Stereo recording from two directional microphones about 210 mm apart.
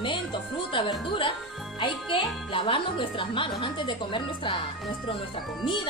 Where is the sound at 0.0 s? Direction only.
25° left (ahead or behind).